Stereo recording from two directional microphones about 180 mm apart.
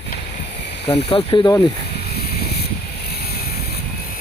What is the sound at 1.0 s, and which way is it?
Speech, 25° left (ahead or behind).